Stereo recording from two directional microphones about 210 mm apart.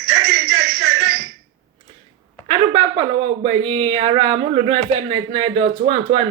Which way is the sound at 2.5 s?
25° right (ahead or behind).